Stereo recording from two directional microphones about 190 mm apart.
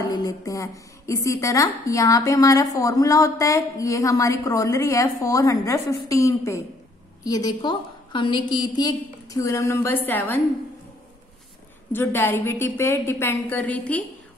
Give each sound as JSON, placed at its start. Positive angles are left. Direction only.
{"t": 0.1, "sound": "a woman's voice", "side_deg": 20}
{"t": 11.9, "sound": "a woman's voice", "side_deg": 10}